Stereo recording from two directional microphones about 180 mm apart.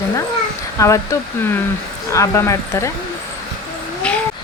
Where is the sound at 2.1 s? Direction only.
15° left (ahead or behind).